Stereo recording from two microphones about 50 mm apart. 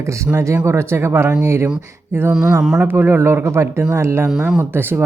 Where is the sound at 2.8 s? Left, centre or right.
Right.